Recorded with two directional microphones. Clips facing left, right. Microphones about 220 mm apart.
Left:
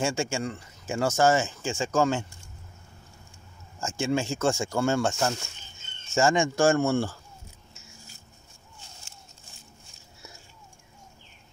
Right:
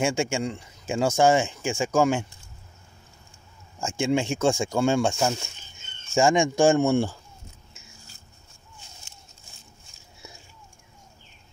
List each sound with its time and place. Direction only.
0.0 s speech: 15° right (ahead or behind)
3.8 s speech: 15° right (ahead or behind)